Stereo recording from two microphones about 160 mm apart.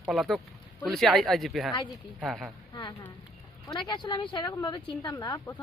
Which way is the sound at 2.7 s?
25° left (ahead or behind).